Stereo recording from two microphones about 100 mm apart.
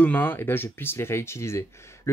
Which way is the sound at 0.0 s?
15° left (ahead or behind).